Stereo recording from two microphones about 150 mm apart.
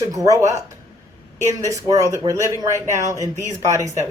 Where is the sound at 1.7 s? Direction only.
20° right (ahead or behind).